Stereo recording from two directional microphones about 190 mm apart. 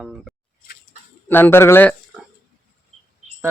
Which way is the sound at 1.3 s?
10° left (ahead or behind).